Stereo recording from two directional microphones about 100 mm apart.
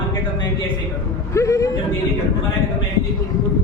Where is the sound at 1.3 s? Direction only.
30° left (ahead or behind).